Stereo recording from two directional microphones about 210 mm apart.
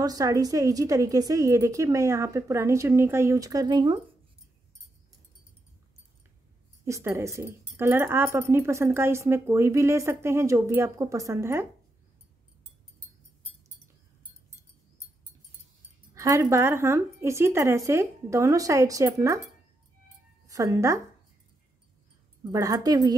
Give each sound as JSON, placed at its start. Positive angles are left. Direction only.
{"t": 0.0, "sound": "a woman's voice", "side_deg": -15}
{"t": 6.8, "sound": "a woman's voice", "side_deg": -15}
{"t": 16.2, "sound": "a woman's voice", "side_deg": -15}
{"t": 20.4, "sound": "speech", "side_deg": -15}
{"t": 22.5, "sound": "a woman's voice", "side_deg": -15}